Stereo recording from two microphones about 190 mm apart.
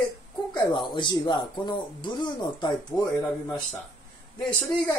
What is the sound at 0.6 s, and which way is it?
Speech, 25° left (ahead or behind).